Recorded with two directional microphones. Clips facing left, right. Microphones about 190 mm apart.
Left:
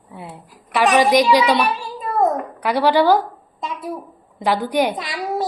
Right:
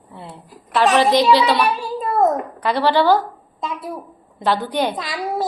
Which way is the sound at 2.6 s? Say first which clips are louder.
Left 1 dB; 10° left (ahead or behind).